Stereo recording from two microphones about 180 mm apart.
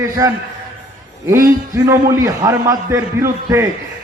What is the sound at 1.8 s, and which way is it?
A man's voice, 15° right (ahead or behind).